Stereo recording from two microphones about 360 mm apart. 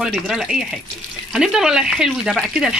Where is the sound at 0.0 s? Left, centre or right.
Centre.